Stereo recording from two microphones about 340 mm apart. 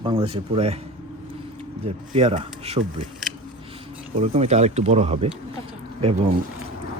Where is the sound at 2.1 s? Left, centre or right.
Centre.